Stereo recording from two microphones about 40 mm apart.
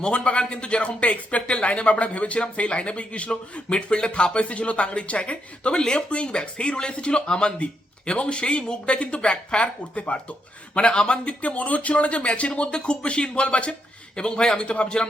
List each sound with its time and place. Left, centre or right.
0.0 s speech: left
11.3 s speech: left